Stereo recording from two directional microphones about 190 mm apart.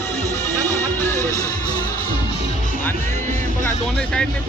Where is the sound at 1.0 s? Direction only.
15° left (ahead or behind).